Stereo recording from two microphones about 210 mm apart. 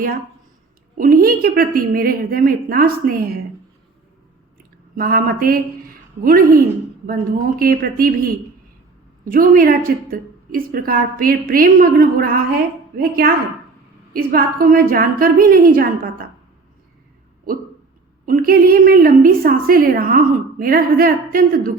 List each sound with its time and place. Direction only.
0.9 s a woman's voice: 40° right (ahead or behind)
4.9 s a woman's voice: 45° right (ahead or behind)
7.6 s a woman's voice: 45° right (ahead or behind)
18.3 s a woman's voice: 45° right (ahead or behind)